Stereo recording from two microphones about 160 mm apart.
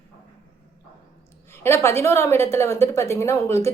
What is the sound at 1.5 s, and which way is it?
A woman's voice, 15° left (ahead or behind).